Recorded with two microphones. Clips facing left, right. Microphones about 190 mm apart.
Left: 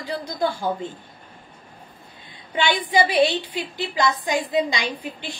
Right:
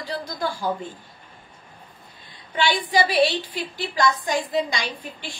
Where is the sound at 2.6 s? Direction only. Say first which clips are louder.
Left 1 dB; 20° left (ahead or behind).